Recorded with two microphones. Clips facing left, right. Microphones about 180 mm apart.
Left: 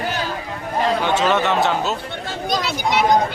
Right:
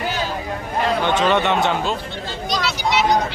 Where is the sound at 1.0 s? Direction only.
5° left (ahead or behind).